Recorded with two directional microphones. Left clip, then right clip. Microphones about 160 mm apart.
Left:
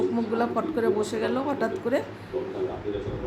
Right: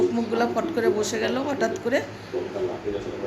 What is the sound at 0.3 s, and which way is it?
Speech, 15° left (ahead or behind).